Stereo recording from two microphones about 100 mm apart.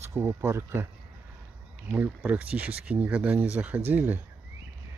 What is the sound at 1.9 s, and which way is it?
Speech, 15° right (ahead or behind).